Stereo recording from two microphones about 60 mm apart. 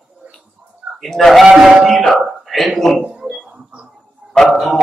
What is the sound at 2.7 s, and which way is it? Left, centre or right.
Speech, centre.